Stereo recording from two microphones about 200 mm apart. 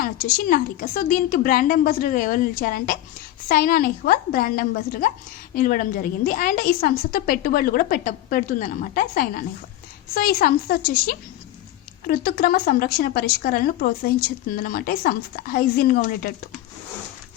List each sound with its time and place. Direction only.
0.0 s a woman's voice: 45° left (ahead or behind)